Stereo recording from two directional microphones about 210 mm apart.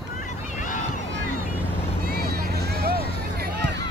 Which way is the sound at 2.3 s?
50° right (ahead or behind).